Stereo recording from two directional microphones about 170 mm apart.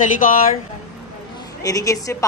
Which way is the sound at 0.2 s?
55° left (ahead or behind).